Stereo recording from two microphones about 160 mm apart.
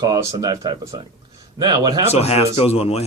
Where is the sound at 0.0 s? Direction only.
25° right (ahead or behind).